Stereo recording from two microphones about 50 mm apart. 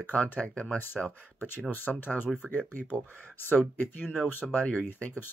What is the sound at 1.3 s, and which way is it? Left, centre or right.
Speech, left.